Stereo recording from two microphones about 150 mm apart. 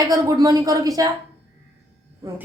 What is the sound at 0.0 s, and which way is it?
Speech, 25° right (ahead or behind).